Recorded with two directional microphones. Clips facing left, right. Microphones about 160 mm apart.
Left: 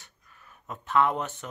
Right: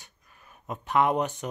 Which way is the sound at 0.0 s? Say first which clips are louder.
Even; 15° right (ahead or behind).